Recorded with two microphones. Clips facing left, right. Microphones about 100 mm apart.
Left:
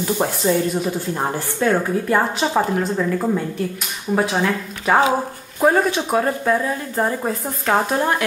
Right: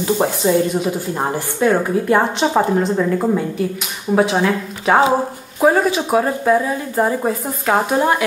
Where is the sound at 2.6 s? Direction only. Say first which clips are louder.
Right 4 dB; 15° right (ahead or behind).